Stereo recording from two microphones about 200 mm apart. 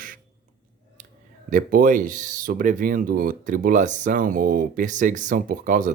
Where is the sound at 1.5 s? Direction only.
40° right (ahead or behind).